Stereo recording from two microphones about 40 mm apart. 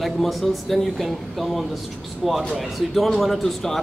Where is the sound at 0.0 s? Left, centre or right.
Centre.